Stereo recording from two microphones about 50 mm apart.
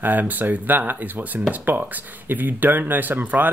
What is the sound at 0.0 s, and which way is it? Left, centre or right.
Speech, right.